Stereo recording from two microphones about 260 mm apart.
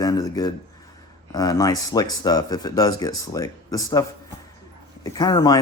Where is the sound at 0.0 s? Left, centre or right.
Centre.